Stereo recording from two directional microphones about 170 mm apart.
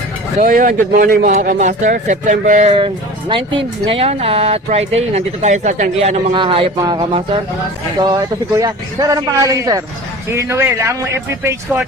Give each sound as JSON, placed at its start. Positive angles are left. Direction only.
{"t": 0.3, "sound": "speech", "side_deg": -55}
{"t": 1.5, "sound": "speech", "side_deg": -45}
{"t": 2.7, "sound": "speech", "side_deg": -30}
{"t": 6.3, "sound": "a man's voice", "side_deg": -30}